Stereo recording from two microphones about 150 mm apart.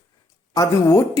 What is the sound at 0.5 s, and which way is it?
Speech, 20° left (ahead or behind).